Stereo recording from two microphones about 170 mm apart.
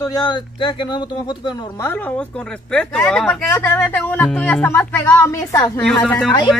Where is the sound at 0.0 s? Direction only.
25° left (ahead or behind).